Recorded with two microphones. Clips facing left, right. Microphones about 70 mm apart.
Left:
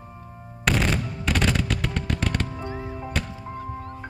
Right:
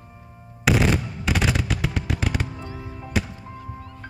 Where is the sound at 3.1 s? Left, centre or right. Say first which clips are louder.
Right 6 dB; centre.